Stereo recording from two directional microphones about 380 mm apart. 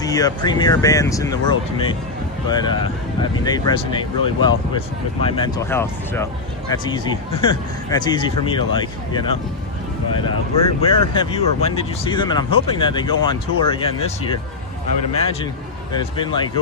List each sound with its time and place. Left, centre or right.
0.0 s speech: centre
10.8 s speech: centre
15.1 s speech: centre